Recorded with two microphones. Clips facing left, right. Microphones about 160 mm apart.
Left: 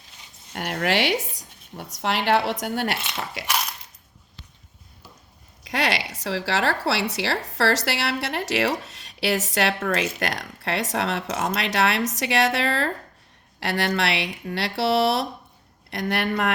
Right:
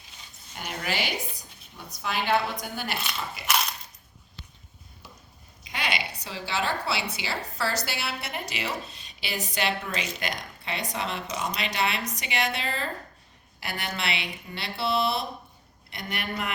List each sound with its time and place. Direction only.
0.5 s speech: 70° left (ahead or behind)
3.4 s coin: 80° left
5.6 s speech: 90° left